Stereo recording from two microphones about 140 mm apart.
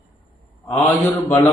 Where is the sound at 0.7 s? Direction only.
15° left (ahead or behind).